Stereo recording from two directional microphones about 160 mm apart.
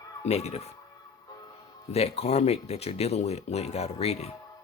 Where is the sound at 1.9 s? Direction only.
40° left (ahead or behind).